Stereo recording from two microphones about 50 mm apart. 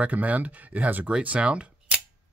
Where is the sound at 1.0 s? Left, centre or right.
Right.